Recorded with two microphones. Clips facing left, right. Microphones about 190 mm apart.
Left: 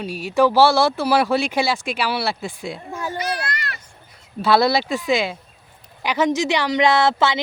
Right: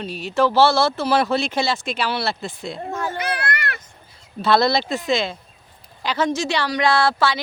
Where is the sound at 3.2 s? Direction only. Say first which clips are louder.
Right 1 dB; 55° right (ahead or behind).